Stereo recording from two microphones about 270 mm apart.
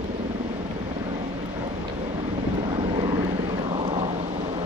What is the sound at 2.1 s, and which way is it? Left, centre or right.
Vehicle, centre.